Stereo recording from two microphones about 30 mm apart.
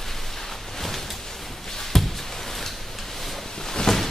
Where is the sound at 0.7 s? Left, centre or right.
Centre.